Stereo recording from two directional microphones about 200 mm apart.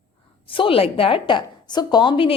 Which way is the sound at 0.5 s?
25° left (ahead or behind).